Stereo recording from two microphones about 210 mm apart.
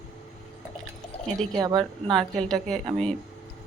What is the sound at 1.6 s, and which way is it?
Speech, 20° right (ahead or behind).